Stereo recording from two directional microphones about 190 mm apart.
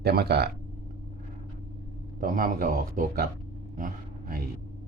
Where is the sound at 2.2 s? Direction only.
45° right (ahead or behind).